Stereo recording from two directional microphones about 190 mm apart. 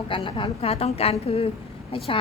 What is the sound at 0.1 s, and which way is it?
A woman's voice, 25° left (ahead or behind).